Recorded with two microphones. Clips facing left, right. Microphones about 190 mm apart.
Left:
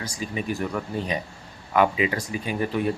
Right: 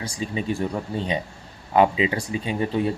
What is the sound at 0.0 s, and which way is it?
Speech, 30° right (ahead or behind).